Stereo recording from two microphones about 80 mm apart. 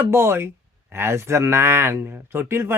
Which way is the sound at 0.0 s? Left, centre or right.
Right.